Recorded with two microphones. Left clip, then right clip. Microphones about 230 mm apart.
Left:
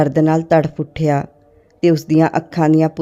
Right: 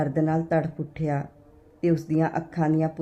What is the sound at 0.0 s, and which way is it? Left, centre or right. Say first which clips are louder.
Speech: left 11 dB; left.